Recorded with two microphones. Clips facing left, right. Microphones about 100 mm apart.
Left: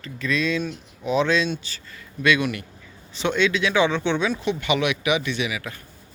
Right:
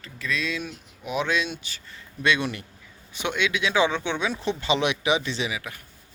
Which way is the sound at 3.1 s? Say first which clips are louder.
Left 5 dB; 15° right (ahead or behind).